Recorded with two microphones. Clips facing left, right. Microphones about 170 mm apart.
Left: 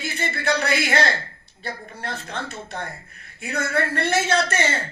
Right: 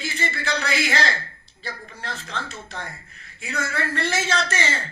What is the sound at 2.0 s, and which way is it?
Speech, 55° left (ahead or behind).